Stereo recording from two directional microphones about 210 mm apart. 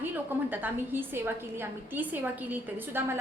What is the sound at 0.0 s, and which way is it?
A woman's voice, 10° right (ahead or behind).